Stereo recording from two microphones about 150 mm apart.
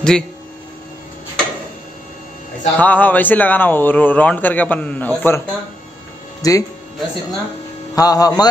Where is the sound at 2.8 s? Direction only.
10° left (ahead or behind).